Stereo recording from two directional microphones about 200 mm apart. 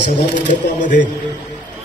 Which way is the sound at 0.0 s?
40° left (ahead or behind).